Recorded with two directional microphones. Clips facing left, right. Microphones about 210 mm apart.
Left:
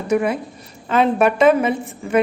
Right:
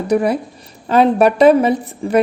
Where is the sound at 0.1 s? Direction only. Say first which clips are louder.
Right 2 dB; 35° right (ahead or behind).